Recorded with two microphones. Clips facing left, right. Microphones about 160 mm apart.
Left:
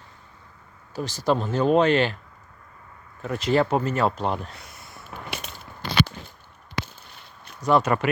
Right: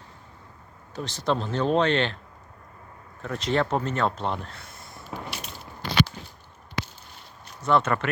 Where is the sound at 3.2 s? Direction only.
5° left (ahead or behind).